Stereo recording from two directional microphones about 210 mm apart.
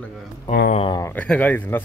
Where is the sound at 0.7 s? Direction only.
25° left (ahead or behind).